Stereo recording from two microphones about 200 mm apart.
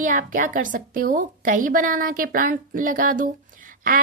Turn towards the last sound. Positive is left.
turn(degrees=-45)  # may be behind; listen again after turning